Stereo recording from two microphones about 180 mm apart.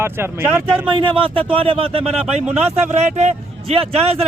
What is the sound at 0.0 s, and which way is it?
Speech, 15° right (ahead or behind).